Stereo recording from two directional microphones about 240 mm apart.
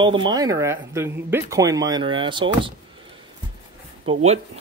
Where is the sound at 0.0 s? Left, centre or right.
Centre.